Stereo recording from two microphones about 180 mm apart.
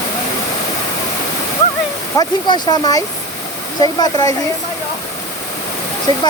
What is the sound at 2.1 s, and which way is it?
Speech, 20° left (ahead or behind).